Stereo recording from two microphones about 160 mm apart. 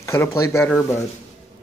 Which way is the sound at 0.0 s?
15° left (ahead or behind).